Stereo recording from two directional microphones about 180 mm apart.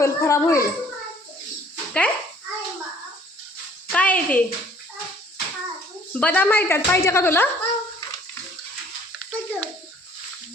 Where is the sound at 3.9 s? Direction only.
10° left (ahead or behind).